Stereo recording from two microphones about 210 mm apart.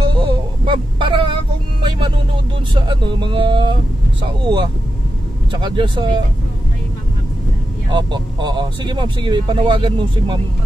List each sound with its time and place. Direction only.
0.0 s a sound: 25° right (ahead or behind)
1.8 s vehicle: 20° right (ahead or behind)
2.7 s speech: 20° right (ahead or behind)
5.5 s speech: 25° right (ahead or behind)
7.9 s speech: 20° right (ahead or behind)